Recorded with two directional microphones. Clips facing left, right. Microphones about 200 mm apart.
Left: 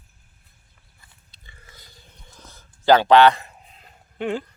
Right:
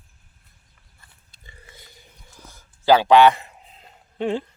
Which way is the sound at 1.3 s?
50° right (ahead or behind).